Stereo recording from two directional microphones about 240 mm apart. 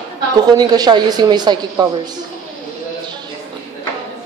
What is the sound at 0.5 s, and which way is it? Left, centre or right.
A woman's voice, centre.